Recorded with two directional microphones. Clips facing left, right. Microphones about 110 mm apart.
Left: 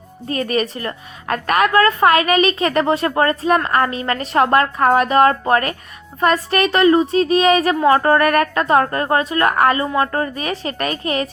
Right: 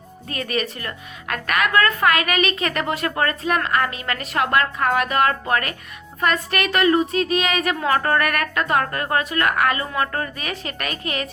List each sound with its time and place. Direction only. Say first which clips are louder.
0.3 s a woman's voice: left 6 dB; 35° left (ahead or behind)